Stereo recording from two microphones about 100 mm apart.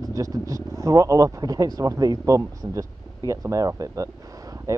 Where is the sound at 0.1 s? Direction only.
35° right (ahead or behind).